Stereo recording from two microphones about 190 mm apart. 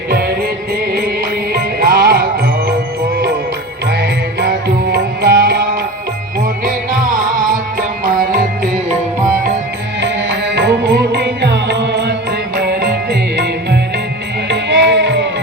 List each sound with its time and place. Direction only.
1.5 s music: 50° right (ahead or behind)
4.0 s music: 60° right (ahead or behind)
10.0 s music: 65° right (ahead or behind)